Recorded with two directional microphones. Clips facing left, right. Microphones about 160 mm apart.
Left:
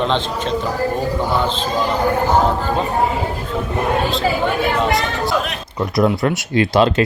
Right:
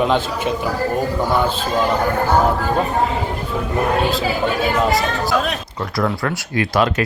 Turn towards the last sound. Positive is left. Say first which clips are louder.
# left 4 dB
turn(degrees=25)  # may be behind; listen again after turning